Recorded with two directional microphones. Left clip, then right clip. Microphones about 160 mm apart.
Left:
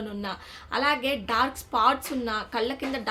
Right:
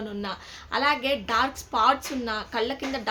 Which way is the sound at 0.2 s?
5° left (ahead or behind).